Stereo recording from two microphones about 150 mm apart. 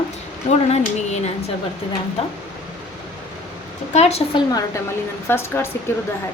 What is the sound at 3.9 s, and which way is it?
Speech, 45° left (ahead or behind).